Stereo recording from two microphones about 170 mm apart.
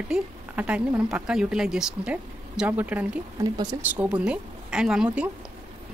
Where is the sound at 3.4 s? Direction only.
20° right (ahead or behind).